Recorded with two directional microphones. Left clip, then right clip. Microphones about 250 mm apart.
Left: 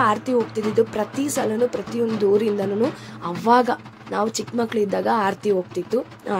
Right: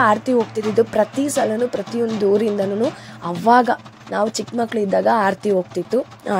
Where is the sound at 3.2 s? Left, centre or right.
Centre.